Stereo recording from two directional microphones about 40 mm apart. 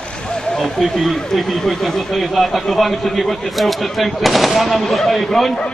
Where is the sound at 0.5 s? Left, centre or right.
Centre.